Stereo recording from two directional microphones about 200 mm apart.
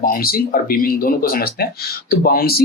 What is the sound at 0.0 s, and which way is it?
Speech, 45° left (ahead or behind).